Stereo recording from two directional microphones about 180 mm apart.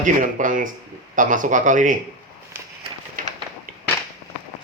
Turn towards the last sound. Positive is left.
turn(degrees=-55)  # may be behind; listen again after turning